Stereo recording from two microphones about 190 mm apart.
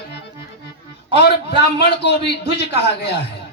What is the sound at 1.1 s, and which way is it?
A man's voice, 60° left (ahead or behind).